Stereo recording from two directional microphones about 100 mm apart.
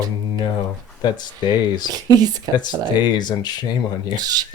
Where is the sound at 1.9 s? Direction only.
40° right (ahead or behind).